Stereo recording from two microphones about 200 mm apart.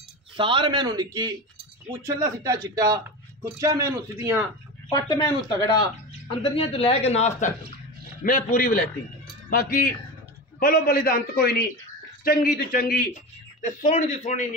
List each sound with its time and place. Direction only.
0.4 s a man's voice: 25° right (ahead or behind)
2.4 s a man's voice: 15° right (ahead or behind)
4.9 s a man's voice: 20° left (ahead or behind); by 14.4 s 35° left (ahead or behind)